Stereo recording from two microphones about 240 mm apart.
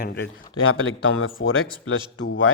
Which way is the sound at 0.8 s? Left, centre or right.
Left.